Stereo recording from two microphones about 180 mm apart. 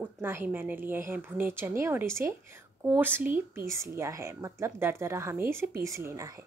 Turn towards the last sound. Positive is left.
turn(degrees=-15)  # may be behind; listen again after turning